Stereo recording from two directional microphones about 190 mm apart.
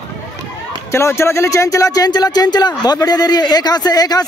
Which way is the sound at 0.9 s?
15° left (ahead or behind).